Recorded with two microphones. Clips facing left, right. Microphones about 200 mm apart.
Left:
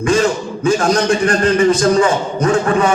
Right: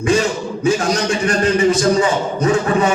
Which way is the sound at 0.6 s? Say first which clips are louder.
Left 3 dB; 55° left (ahead or behind).